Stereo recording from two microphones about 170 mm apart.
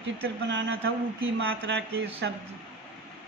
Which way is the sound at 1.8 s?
75° right (ahead or behind).